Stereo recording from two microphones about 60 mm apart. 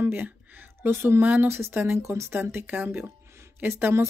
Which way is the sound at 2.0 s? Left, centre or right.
Right.